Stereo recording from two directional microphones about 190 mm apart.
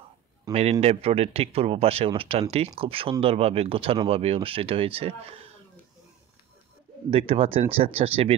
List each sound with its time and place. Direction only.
0.5 s speech: 35° right (ahead or behind)
7.1 s speech: 30° right (ahead or behind)